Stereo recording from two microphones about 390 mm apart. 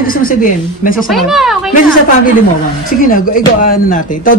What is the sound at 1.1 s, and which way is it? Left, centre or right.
Speech, centre.